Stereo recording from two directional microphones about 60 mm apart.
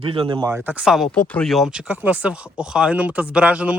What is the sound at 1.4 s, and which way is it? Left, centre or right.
Speech, centre.